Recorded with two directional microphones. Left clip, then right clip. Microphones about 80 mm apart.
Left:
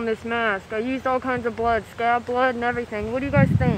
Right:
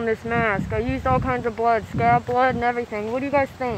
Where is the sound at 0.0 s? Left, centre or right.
Left.